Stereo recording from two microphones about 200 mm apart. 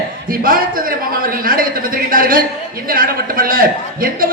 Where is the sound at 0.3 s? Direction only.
45° right (ahead or behind).